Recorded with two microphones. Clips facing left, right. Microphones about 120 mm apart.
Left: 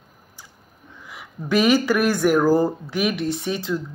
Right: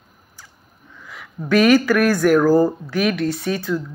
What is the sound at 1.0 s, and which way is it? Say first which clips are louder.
Speech: right 3 dB; 15° left (ahead or behind).